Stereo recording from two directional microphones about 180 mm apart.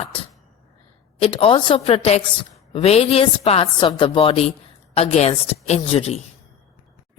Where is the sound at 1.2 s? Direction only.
30° left (ahead or behind).